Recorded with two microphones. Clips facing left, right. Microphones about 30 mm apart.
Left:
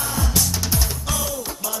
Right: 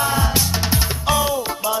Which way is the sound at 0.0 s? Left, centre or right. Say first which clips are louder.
Right 5 dB; right.